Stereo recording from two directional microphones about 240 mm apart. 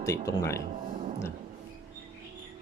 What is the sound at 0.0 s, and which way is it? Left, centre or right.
Speech, centre.